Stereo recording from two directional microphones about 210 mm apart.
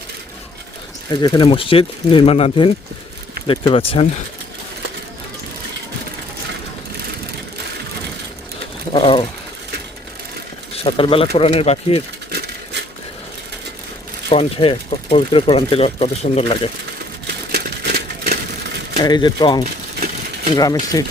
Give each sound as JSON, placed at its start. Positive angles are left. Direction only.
{"t": 1.1, "sound": "speech", "side_deg": 20}
{"t": 8.9, "sound": "speech", "side_deg": 25}
{"t": 10.8, "sound": "speech", "side_deg": 25}
{"t": 12.3, "sound": "a sound", "side_deg": -50}
{"t": 14.3, "sound": "speech", "side_deg": 30}
{"t": 17.5, "sound": "a sound", "side_deg": -50}
{"t": 19.0, "sound": "speech", "side_deg": 20}